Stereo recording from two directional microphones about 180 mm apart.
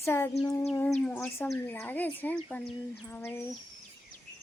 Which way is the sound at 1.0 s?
10° left (ahead or behind).